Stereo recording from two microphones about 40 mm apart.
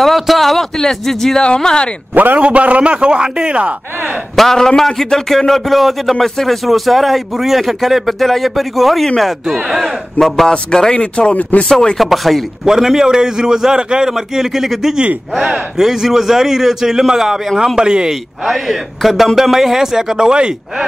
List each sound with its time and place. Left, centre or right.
0.0 s a man's voice: centre
1.4 s speech: left
2.1 s a man's voice: right
2.4 s a man's voice: right
4.4 s a man's voice: centre
10.2 s a man's voice: centre
10.7 s speech: centre
12.0 s a man's voice: centre; by 14.1 s right
14.1 s a man's voice: centre
15.0 s a man's voice: right
15.8 s a man's voice: centre
18.4 s a man's voice: centre; by 20.5 s right